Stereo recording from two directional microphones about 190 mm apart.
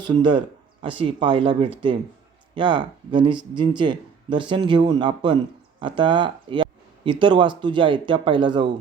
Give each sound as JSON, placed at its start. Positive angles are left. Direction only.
{"t": 0.0, "sound": "speech", "side_deg": -25}